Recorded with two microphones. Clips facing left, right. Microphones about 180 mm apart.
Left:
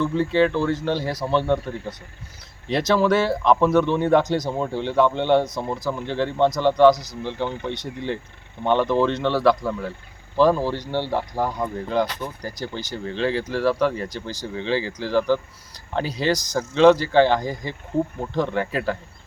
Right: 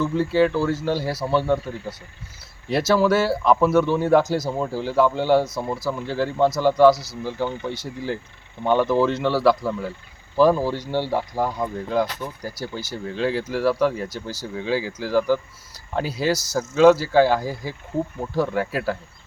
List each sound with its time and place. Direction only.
0.0 s speech: 5° right (ahead or behind)